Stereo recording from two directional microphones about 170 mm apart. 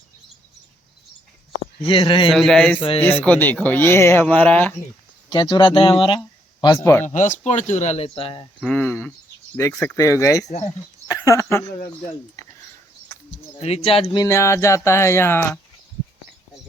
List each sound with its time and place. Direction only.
1.8 s speech: 35° left (ahead or behind)
2.3 s speech: centre (ahead or behind)
5.3 s speech: 25° left (ahead or behind)
7.0 s speech: 45° left (ahead or behind); by 8.4 s 30° left (ahead or behind)
8.6 s speech: 10° left (ahead or behind)
13.6 s speech: 40° left (ahead or behind); by 15.4 s 15° left (ahead or behind)